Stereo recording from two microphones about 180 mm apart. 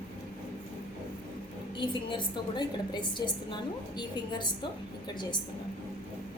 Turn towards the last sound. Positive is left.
turn(degrees=25)  # may be behind; listen again after turning